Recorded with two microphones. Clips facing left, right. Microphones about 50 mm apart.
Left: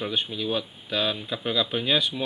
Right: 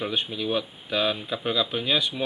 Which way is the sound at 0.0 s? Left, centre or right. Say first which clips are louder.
Even; centre.